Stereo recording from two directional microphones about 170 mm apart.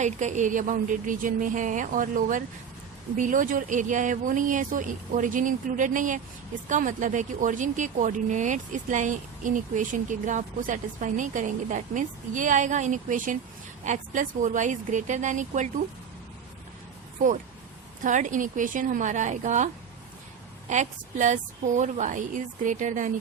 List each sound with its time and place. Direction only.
0.0 s speech: 45° right (ahead or behind)
18.0 s speech: 45° right (ahead or behind)